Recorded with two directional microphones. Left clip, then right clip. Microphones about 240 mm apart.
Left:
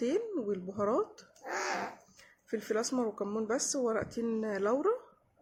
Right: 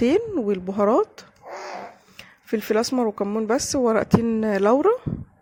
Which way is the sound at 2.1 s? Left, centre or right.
Right.